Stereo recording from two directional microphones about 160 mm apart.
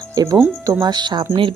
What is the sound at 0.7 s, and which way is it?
Speech, 25° right (ahead or behind).